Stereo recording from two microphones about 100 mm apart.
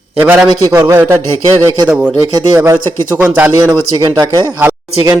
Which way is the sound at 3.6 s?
40° right (ahead or behind).